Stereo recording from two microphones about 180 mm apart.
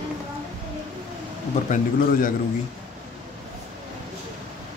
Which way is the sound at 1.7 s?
45° left (ahead or behind).